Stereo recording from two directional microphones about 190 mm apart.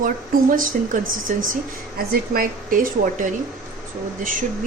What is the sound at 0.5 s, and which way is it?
A woman's voice, 45° right (ahead or behind).